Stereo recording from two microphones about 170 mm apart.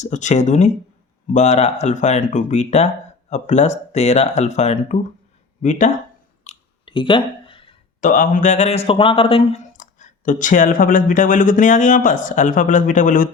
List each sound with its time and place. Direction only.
0.0 s speech: 45° left (ahead or behind)
6.4 s chewing: 35° left (ahead or behind)
8.0 s speech: 55° left (ahead or behind)